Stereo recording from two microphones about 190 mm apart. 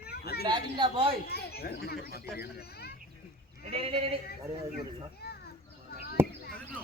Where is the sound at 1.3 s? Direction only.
55° left (ahead or behind).